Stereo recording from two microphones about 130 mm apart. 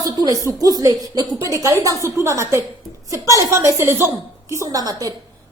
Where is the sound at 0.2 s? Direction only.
30° right (ahead or behind).